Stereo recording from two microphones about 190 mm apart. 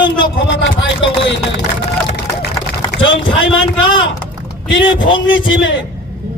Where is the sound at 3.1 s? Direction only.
80° left.